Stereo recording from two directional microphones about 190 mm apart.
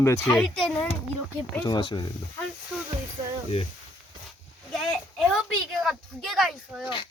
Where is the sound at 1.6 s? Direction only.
25° left (ahead or behind).